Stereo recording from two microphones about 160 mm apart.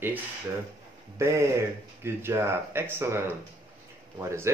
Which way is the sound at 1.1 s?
20° right (ahead or behind).